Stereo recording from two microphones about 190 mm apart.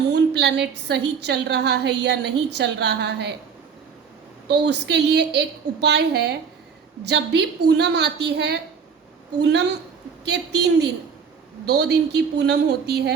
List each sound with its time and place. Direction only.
0.1 s a woman's voice: 65° right (ahead or behind)
4.4 s a woman's voice: 60° right (ahead or behind)